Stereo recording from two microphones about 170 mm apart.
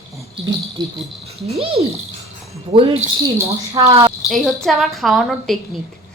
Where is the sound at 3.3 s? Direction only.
20° right (ahead or behind).